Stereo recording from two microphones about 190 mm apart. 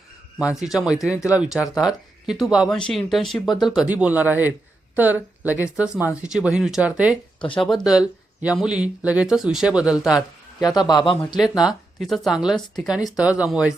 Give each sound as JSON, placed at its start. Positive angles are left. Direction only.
{"t": 0.3, "sound": "speech", "side_deg": -5}
{"t": 10.6, "sound": "a man's voice", "side_deg": 20}
{"t": 11.3, "sound": "speech", "side_deg": 0}